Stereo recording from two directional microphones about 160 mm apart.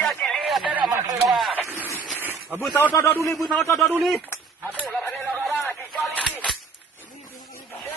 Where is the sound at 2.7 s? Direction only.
15° left (ahead or behind).